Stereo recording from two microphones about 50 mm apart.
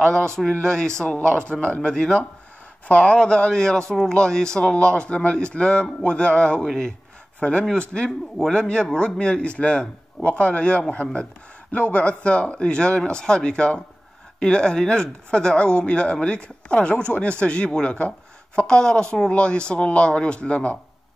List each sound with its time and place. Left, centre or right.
0.6 s speech: centre
1.5 s speech: left
6.6 s speech: centre
7.3 s speech: left
7.9 s speech: centre